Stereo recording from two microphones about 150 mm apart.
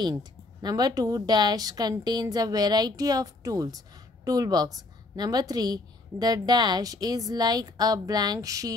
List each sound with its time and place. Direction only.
0.0 s a woman's voice: 25° right (ahead or behind)